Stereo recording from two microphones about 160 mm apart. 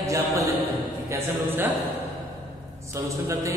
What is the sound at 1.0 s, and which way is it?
Speech, 15° right (ahead or behind).